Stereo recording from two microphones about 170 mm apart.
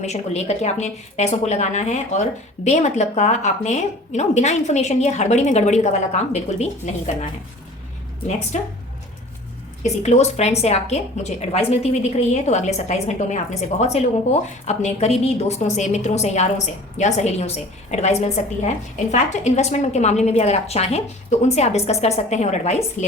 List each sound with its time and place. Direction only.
0.0 s a woman's voice: 40° left (ahead or behind)
8.5 s a woman's voice: 45° left (ahead or behind)
9.8 s a woman's voice: 40° left (ahead or behind)